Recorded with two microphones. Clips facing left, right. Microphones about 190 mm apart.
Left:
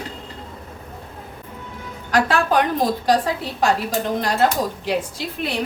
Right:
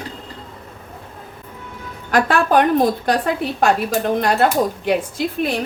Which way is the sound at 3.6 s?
55° right (ahead or behind).